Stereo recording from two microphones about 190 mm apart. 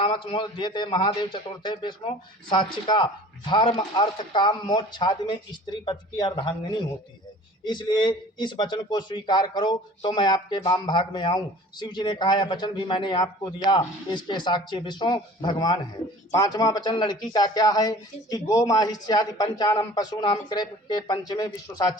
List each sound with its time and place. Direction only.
0.0 s a man's voice: 25° left (ahead or behind)